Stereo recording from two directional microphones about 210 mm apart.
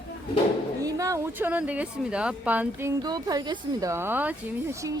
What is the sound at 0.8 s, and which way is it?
Speech, 15° right (ahead or behind).